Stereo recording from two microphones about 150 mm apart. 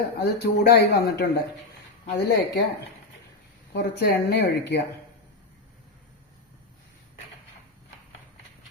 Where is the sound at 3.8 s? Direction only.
90° left.